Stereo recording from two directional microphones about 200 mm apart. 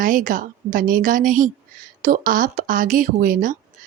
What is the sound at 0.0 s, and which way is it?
Speech, 40° right (ahead or behind).